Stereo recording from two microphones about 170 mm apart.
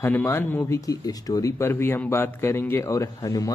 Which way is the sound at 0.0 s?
15° left (ahead or behind).